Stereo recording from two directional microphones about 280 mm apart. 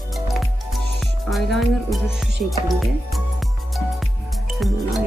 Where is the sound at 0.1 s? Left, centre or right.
Centre.